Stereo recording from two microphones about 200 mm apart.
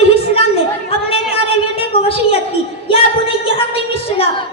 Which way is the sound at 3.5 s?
30° left (ahead or behind).